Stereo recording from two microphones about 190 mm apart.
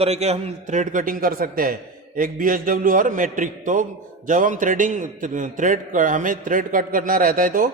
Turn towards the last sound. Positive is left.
turn(degrees=-50)  # may be behind; listen again after turning